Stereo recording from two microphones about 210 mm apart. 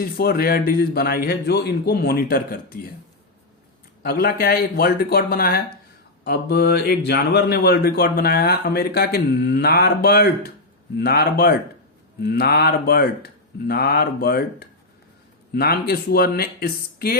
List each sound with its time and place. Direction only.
0.0 s speech: 45° left (ahead or behind)
4.0 s speech: 45° left (ahead or behind)